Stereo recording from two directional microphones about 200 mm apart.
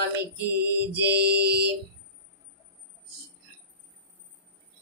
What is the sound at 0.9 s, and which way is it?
Speech, 55° right (ahead or behind).